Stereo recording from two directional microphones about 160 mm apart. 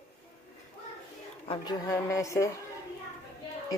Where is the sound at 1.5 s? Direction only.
25° left (ahead or behind).